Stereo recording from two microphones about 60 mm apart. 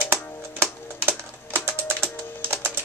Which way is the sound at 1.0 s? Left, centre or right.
Right.